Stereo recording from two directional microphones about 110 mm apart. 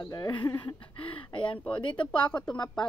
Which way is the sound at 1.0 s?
50° left (ahead or behind).